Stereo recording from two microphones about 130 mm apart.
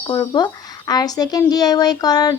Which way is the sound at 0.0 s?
35° left (ahead or behind).